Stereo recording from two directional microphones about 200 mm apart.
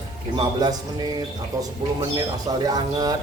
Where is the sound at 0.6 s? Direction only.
20° right (ahead or behind).